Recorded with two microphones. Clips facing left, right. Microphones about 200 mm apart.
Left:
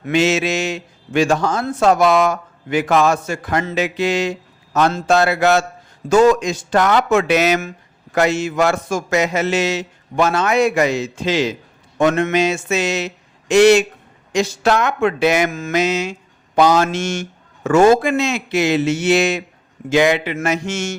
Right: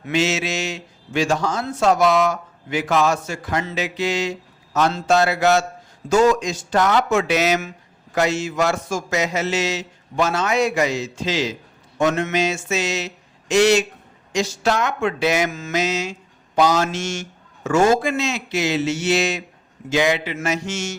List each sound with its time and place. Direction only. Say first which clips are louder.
0.0 s a man's voice: left 5 dB; 55° left (ahead or behind)